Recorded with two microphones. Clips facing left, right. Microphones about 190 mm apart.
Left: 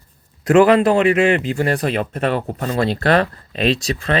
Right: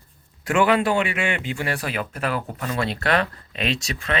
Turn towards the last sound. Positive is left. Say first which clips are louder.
# left 7 dB
turn(degrees=35)  # may be behind; listen again after turning